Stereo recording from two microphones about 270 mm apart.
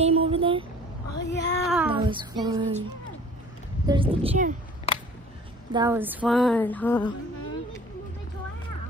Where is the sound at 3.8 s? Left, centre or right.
Centre.